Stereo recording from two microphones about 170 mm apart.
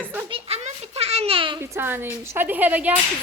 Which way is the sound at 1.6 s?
15° right (ahead or behind).